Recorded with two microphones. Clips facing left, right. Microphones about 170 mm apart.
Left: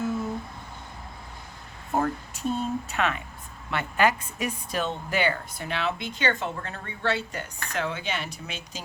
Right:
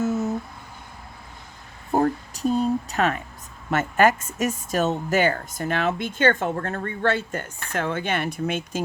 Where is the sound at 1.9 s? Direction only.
35° right (ahead or behind).